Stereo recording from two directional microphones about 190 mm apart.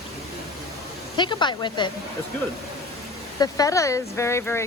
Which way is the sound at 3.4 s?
20° left (ahead or behind).